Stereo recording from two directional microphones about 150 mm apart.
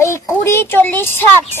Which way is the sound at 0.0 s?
15° left (ahead or behind).